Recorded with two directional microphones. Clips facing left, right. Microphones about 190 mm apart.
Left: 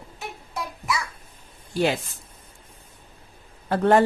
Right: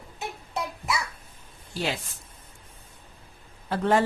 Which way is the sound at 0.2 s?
20° right (ahead or behind).